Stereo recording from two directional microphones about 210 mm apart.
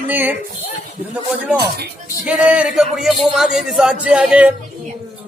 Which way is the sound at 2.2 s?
5° right (ahead or behind).